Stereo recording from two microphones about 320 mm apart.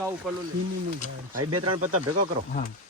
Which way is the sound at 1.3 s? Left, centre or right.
Right.